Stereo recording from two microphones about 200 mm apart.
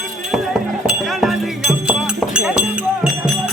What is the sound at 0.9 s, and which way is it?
Music, centre (ahead or behind).